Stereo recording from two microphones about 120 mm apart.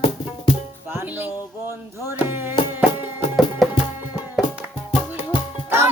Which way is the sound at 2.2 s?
15° right (ahead or behind).